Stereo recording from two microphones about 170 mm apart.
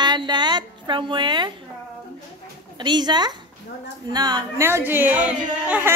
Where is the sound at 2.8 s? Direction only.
25° right (ahead or behind).